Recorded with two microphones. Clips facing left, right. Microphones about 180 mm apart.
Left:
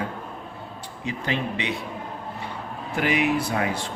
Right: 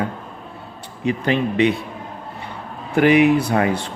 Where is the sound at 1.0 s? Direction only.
60° right (ahead or behind).